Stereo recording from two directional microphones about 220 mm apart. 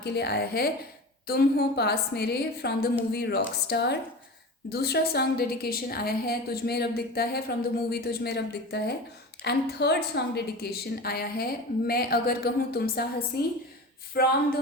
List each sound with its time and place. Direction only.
0.0 s a woman's voice: 50° left (ahead or behind)